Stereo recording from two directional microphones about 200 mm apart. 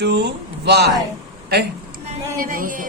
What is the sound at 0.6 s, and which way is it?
Speech, 55° right (ahead or behind).